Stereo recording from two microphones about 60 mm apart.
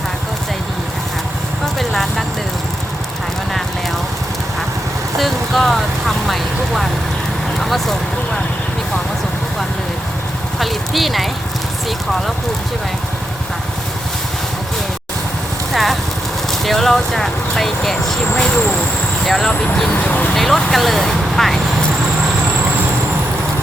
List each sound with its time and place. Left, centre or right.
1.6 s vehicle: centre
5.1 s speech: centre
10.6 s speech: centre
15.7 s speech: centre
19.5 s speech: centre
20.0 s speech: left
20.3 s speech: centre